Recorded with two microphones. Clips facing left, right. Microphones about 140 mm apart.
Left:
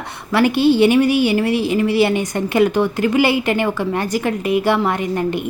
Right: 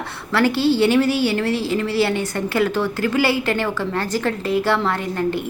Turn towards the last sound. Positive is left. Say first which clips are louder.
# left 2 dB
turn(degrees=15)  # may be behind; listen again after turning